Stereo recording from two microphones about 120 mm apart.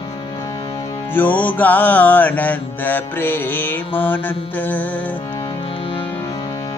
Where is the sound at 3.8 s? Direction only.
50° left (ahead or behind).